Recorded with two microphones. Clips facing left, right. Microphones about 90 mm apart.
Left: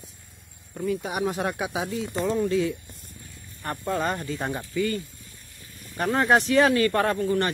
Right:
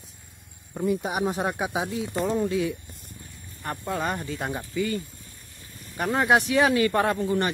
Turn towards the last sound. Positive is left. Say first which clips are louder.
# even
turn(degrees=-15)  # may be behind; listen again after turning